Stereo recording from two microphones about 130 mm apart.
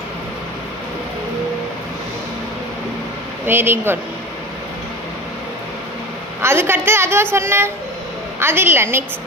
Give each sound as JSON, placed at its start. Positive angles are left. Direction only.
{"t": 3.4, "sound": "speech", "side_deg": -15}
{"t": 6.4, "sound": "a woman's voice", "side_deg": -20}